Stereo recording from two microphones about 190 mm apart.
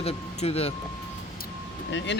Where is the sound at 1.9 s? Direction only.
70° left (ahead or behind).